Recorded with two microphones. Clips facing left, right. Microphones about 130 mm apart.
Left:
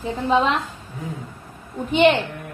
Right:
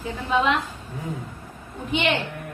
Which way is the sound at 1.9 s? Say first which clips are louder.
Left 8 dB; 40° left (ahead or behind).